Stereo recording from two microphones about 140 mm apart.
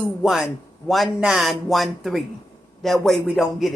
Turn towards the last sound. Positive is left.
turn(degrees=0)  # may be behind; listen again after turning